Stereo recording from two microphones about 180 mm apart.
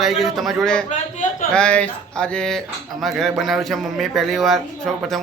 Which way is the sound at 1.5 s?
5° left (ahead or behind).